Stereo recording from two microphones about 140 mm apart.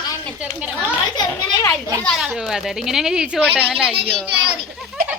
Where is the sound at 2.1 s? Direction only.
5° right (ahead or behind).